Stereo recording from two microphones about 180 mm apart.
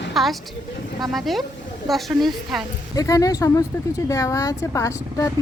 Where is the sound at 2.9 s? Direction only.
20° left (ahead or behind).